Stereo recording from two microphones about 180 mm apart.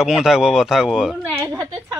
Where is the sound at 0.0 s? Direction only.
5° right (ahead or behind).